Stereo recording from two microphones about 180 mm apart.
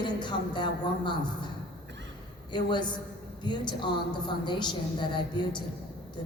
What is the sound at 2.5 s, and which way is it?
A woman's voice, 25° left (ahead or behind).